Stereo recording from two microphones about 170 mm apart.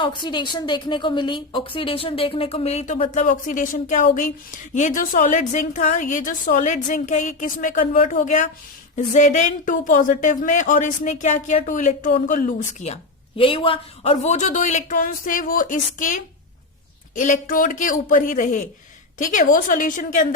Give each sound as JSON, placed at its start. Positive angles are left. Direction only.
{"t": 0.0, "sound": "a woman's voice", "side_deg": 25}